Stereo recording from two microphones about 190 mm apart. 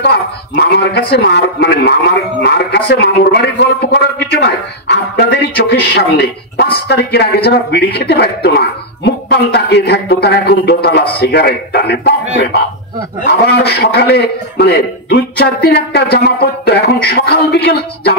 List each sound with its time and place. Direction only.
0.0 s speech: 60° left (ahead or behind)
13.2 s speech: 60° left (ahead or behind)